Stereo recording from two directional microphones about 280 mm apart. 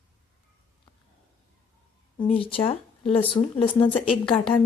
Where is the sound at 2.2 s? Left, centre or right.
Centre.